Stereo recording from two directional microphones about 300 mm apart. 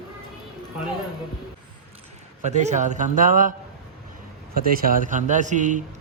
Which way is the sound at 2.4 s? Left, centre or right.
Right.